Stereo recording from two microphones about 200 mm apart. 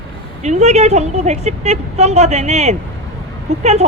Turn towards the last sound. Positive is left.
turn(degrees=-35)  # may be behind; listen again after turning